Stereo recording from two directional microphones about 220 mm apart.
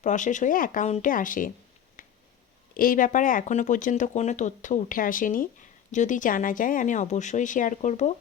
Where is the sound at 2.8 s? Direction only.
40° left (ahead or behind).